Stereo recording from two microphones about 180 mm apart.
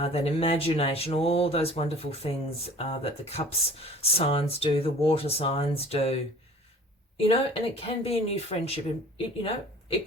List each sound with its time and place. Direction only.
0.0 s speech: 35° left (ahead or behind)